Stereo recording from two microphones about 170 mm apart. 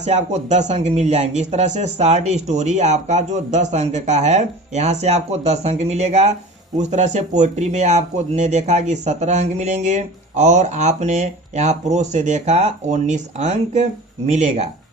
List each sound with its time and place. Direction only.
0.0 s speech: 40° right (ahead or behind)